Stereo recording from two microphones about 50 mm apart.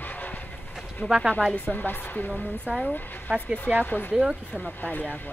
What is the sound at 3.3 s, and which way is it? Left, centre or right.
Speech, right.